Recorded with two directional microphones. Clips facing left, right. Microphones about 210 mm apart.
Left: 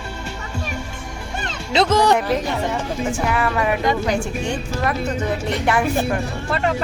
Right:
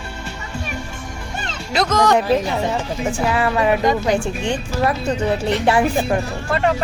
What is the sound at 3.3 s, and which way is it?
Speech, 25° right (ahead or behind).